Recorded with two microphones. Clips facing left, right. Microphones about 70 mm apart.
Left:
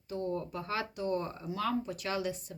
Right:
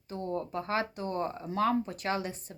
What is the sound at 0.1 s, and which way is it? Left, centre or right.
A woman's voice, right.